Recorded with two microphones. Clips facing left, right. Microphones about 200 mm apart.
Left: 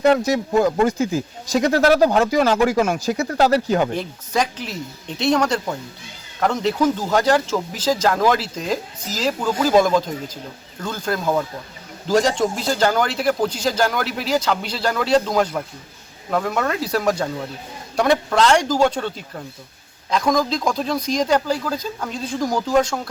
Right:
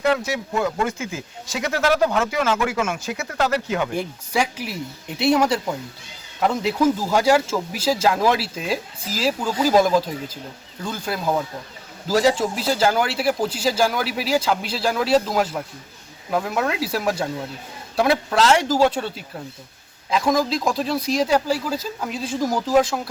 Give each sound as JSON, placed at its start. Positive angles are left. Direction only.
{"t": 0.0, "sound": "speech", "side_deg": 40}
{"t": 3.9, "sound": "a man's voice", "side_deg": -10}